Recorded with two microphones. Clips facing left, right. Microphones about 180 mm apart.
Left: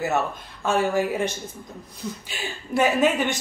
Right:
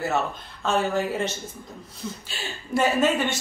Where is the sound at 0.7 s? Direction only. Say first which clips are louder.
Left 2 dB; 10° left (ahead or behind).